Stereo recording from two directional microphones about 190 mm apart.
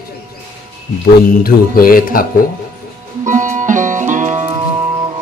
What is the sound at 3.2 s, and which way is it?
Music, 40° right (ahead or behind).